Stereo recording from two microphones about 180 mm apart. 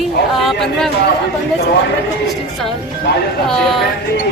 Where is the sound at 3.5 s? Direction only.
Centre (ahead or behind).